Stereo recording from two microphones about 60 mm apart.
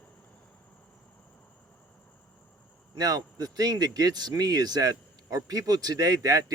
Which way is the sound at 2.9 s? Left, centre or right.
Right.